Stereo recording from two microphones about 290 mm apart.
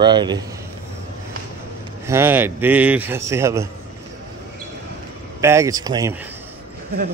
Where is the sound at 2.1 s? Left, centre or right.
Centre.